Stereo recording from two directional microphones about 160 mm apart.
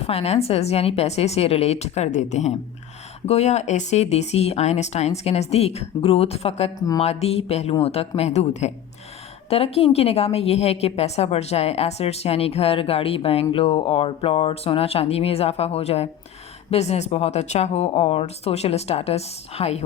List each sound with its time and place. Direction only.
0.0 s a woman's voice: 40° left (ahead or behind)